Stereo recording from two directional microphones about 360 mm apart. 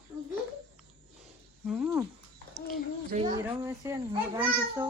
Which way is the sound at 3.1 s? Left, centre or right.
Right.